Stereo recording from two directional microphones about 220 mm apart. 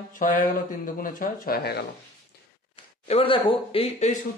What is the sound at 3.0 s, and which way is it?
A man's voice, 25° left (ahead or behind).